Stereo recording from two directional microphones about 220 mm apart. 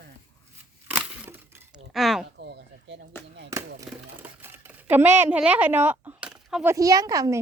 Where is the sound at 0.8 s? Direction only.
10° right (ahead or behind).